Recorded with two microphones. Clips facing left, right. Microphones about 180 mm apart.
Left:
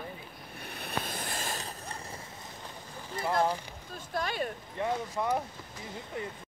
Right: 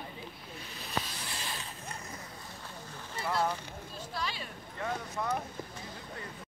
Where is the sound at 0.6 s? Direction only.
60° left (ahead or behind).